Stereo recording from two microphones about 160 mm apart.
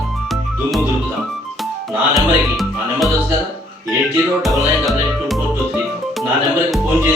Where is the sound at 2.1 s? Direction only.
Centre (ahead or behind).